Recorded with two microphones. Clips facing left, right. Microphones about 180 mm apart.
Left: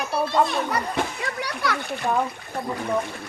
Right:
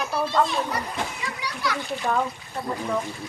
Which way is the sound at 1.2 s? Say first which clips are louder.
Left 2 dB; 60° left (ahead or behind).